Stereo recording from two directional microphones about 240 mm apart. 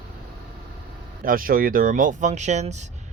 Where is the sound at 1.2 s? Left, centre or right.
Right.